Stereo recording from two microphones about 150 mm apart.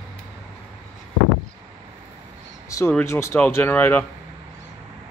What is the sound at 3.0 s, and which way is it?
Speech, 15° left (ahead or behind).